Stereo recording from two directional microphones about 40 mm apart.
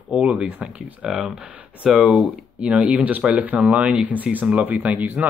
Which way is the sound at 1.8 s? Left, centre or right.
Centre.